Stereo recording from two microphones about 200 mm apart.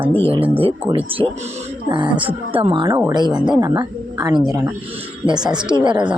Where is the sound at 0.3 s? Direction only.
25° right (ahead or behind).